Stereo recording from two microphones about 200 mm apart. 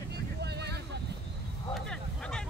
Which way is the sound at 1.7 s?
5° left (ahead or behind).